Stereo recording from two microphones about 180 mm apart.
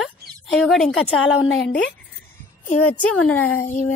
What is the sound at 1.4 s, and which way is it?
Speech, 85° left.